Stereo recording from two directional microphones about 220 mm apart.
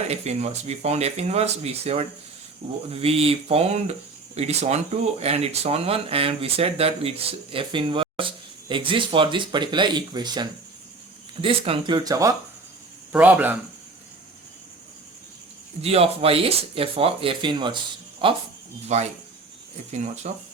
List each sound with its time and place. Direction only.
0.1 s speech: 30° right (ahead or behind); by 13.6 s 10° right (ahead or behind)
15.8 s speech: 25° right (ahead or behind)